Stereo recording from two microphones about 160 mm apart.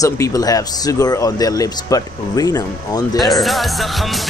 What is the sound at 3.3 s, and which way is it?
Music, centre (ahead or behind).